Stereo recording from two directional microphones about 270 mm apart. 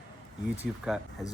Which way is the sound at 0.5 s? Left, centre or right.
Centre.